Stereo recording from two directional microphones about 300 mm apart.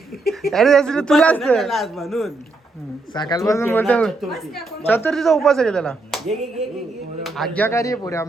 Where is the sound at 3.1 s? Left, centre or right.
Centre.